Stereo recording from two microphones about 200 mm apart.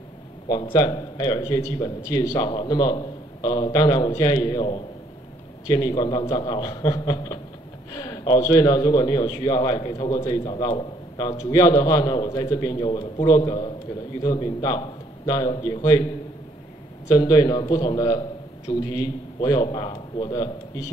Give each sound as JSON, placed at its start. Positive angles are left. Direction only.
{"t": 0.7, "sound": "a man's voice", "side_deg": 20}
{"t": 17.1, "sound": "a man's voice", "side_deg": 20}